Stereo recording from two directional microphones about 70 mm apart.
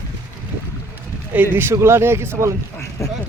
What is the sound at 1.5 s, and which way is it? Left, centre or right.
Speech, right.